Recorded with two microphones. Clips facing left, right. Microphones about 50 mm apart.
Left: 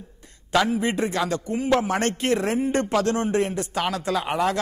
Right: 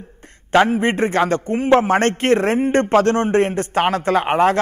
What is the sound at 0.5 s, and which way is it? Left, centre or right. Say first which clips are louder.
A man's voice: right 6 dB; right.